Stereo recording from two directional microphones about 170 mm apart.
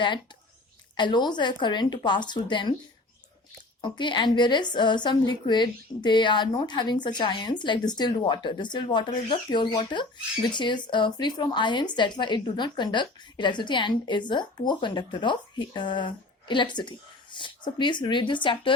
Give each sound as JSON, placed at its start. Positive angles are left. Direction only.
{"t": 0.9, "sound": "a woman's voice", "side_deg": 25}
{"t": 3.8, "sound": "a woman's voice", "side_deg": 25}